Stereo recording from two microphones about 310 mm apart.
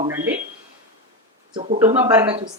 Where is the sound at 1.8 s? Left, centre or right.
Centre.